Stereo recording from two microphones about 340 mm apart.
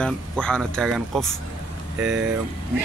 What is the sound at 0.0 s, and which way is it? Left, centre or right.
Speech, centre.